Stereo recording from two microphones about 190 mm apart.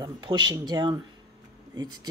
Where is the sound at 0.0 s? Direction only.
20° right (ahead or behind).